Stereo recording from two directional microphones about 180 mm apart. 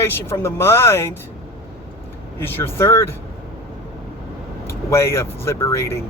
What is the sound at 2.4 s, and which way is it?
Speech, 10° left (ahead or behind).